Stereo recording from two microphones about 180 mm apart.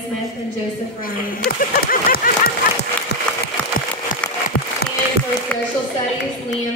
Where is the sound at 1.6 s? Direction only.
50° left (ahead or behind).